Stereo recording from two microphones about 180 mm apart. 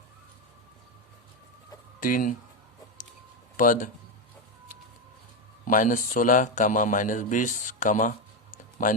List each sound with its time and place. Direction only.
2.0 s speech: 50° left (ahead or behind)
3.6 s a man's voice: 50° left (ahead or behind)
5.6 s a man's voice: 50° left (ahead or behind)